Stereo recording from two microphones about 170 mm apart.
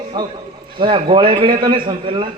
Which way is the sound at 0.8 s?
30° right (ahead or behind).